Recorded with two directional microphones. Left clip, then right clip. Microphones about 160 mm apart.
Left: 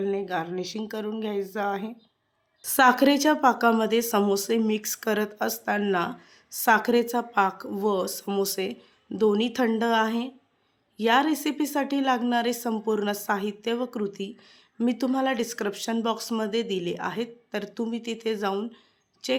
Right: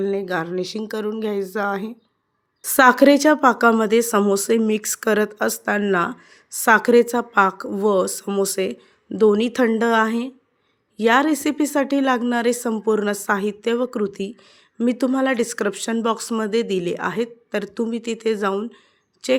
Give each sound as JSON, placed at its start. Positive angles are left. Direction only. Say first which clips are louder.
{"t": 0.0, "sound": "a woman's voice", "louder": "right 5 dB", "side_deg": -30}